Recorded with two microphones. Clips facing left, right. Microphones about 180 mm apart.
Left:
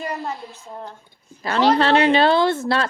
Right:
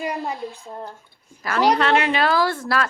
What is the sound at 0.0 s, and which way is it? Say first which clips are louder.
Speech: right 2 dB; 10° right (ahead or behind).